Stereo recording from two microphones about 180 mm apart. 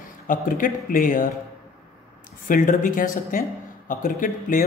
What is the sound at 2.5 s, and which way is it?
Speech, 50° left (ahead or behind).